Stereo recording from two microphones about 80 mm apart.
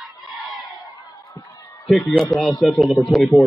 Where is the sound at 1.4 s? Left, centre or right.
Left.